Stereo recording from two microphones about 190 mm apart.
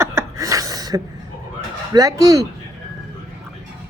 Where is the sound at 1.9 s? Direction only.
15° right (ahead or behind).